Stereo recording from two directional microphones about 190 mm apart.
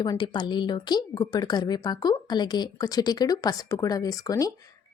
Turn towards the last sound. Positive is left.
turn(degrees=20)  # may be behind; listen again after turning